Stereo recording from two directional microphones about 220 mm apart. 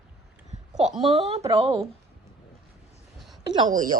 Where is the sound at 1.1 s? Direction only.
30° right (ahead or behind).